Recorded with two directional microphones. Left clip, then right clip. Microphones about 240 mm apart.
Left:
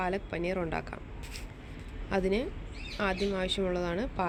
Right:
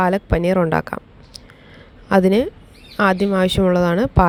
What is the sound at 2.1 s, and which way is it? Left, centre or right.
Speech, right.